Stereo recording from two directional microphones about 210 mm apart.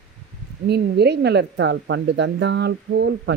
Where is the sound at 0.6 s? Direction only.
50° right (ahead or behind).